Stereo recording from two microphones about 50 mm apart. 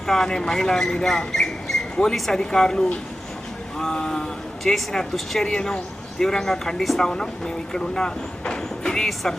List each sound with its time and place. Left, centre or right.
0.1 s speech: centre
7.1 s speech: centre